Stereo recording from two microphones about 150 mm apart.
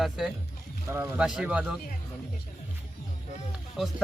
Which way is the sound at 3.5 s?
Centre (ahead or behind).